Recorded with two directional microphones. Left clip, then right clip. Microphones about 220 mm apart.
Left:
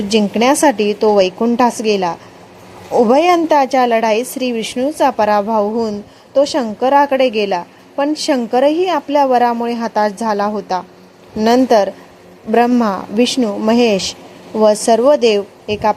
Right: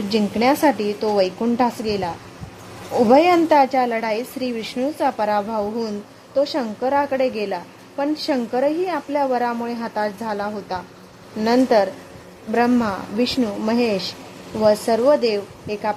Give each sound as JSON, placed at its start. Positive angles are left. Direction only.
{"t": 0.1, "sound": "a woman's voice", "side_deg": 15}